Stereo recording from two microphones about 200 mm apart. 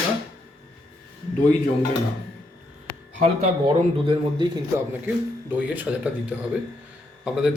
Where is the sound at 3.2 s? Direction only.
30° right (ahead or behind).